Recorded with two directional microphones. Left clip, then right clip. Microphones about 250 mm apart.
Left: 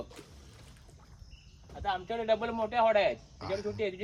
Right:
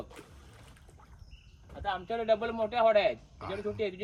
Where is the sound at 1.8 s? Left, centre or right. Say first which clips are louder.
Right 1 dB; left.